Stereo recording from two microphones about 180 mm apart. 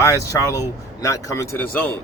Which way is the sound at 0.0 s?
15° left (ahead or behind).